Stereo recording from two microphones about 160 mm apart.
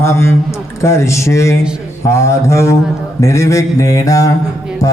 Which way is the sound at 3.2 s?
20° left (ahead or behind).